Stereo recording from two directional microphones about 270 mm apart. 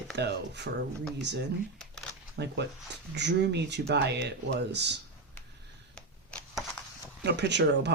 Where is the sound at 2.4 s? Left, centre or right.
Right.